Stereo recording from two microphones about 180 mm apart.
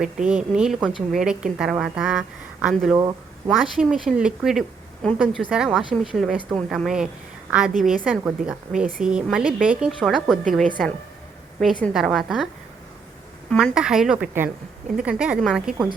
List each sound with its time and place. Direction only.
0.3 s a woman's voice: 5° right (ahead or behind)
2.9 s speech: 20° right (ahead or behind)
3.6 s a woman's voice: centre (ahead or behind)
13.5 s a woman's voice: 5° right (ahead or behind)